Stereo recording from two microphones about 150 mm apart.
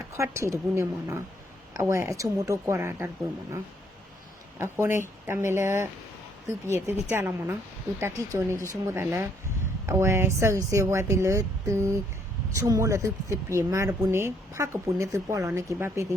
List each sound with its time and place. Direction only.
0.2 s speech: 20° right (ahead or behind)
4.5 s speech: 15° right (ahead or behind)